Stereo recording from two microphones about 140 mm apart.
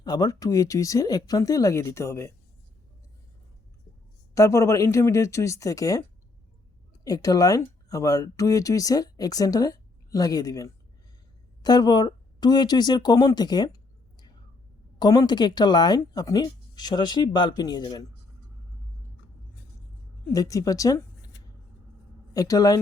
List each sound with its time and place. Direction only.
0.0 s speech: 30° left (ahead or behind)
4.4 s speech: 20° left (ahead or behind)
14.9 s speech: 30° left (ahead or behind)
20.3 s speech: 25° left (ahead or behind)
22.3 s a woman's voice: 25° left (ahead or behind)